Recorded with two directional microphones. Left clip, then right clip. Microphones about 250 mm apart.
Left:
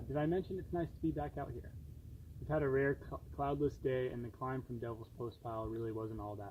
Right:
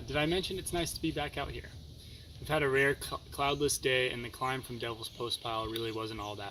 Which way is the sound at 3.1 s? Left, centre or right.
Right.